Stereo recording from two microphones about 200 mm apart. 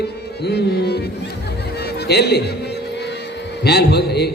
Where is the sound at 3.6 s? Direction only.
55° left (ahead or behind).